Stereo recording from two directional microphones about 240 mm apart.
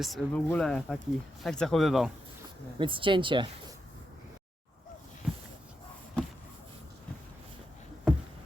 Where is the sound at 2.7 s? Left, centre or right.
Right.